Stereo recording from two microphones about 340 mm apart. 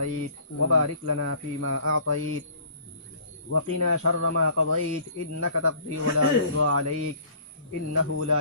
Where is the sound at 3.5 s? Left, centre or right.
Right.